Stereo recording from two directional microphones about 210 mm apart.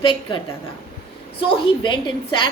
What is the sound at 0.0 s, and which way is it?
Speech, 25° left (ahead or behind).